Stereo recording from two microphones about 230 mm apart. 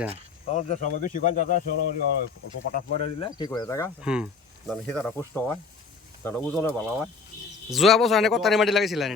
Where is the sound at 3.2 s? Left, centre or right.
Centre.